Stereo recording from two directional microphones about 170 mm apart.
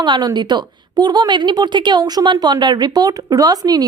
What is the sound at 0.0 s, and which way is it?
A woman's voice, 25° right (ahead or behind).